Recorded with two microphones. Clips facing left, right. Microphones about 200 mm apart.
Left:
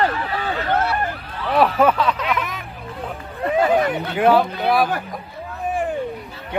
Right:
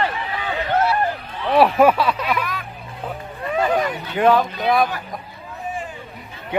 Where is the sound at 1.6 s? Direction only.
10° right (ahead or behind).